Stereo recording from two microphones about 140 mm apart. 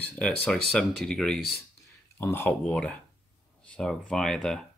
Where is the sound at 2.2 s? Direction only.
15° left (ahead or behind).